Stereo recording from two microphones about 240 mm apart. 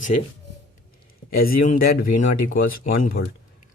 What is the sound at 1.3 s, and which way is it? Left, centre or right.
Speech, left.